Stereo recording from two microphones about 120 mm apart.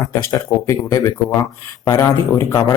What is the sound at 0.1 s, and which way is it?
Speech, 25° left (ahead or behind).